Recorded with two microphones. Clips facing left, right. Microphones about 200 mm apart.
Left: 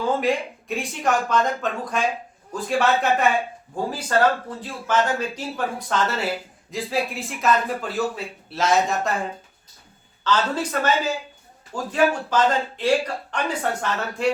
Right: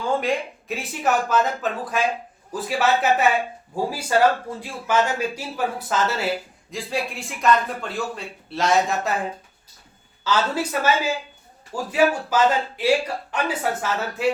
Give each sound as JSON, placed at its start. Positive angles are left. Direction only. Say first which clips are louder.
{"t": 0.8, "sound": "speech", "louder": "even", "side_deg": -5}
{"t": 10.2, "sound": "speech", "louder": "even", "side_deg": -10}